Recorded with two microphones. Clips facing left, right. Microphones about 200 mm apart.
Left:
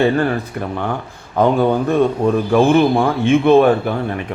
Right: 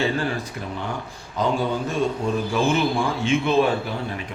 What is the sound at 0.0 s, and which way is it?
A man's voice, 60° left (ahead or behind).